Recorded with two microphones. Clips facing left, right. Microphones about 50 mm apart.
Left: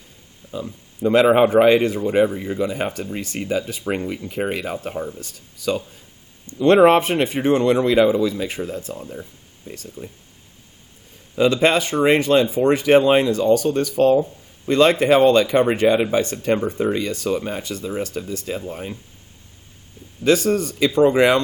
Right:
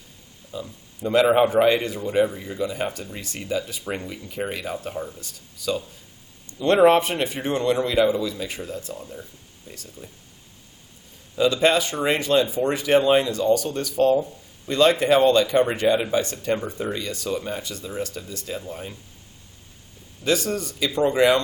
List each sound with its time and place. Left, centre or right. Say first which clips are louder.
1.1 s speech: left 3 dB; left
9.7 s speech: left 7 dB; left
11.3 s speech: left 3 dB; left
20.2 s speech: left 6 dB; left